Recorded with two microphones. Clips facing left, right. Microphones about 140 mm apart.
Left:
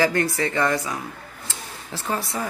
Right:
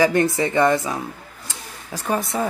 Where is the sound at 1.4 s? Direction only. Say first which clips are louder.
Right 1 dB; 15° right (ahead or behind).